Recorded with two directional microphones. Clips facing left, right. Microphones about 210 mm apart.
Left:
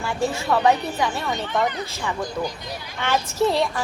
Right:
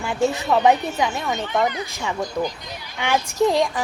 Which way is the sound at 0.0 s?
15° right (ahead or behind).